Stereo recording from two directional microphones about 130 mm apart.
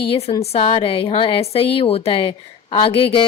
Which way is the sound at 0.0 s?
50° left (ahead or behind).